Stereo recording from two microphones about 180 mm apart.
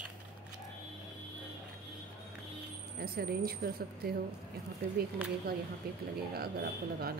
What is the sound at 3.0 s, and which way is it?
A woman's voice, 60° right (ahead or behind).